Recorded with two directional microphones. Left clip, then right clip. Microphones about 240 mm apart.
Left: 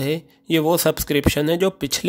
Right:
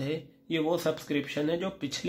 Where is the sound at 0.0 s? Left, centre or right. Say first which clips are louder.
Left 10 dB; left.